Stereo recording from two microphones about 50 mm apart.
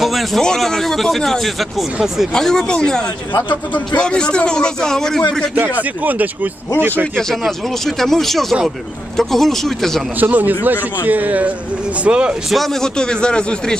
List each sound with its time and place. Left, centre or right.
0.0 s speech: centre
2.3 s a man's voice: centre
3.7 s speech: left
4.0 s a man's voice: centre
5.8 s speech: right
7.6 s speech: centre
10.2 s speech: right
12.5 s a man's voice: centre